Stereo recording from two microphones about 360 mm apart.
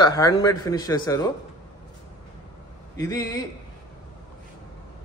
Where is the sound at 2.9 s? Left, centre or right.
Centre.